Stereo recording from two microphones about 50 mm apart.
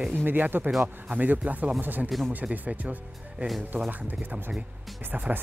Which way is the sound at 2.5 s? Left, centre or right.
Right.